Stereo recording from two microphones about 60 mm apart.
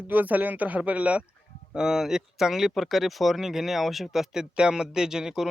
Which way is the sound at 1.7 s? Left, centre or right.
Centre.